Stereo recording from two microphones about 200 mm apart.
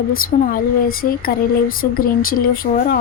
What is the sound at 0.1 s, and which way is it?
A woman's voice, 45° left (ahead or behind).